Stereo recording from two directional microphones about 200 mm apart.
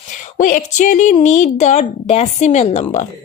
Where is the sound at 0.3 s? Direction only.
40° left (ahead or behind).